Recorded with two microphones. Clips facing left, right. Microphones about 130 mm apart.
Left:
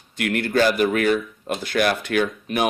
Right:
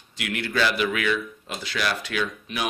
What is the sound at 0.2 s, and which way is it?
Speech, 50° left (ahead or behind).